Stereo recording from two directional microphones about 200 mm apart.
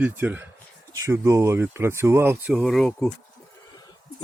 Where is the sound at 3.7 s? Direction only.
20° left (ahead or behind).